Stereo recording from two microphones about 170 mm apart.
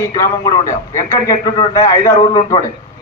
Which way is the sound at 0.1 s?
20° left (ahead or behind).